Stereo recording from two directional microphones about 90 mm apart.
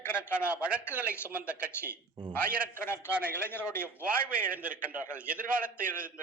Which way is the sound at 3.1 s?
15° right (ahead or behind).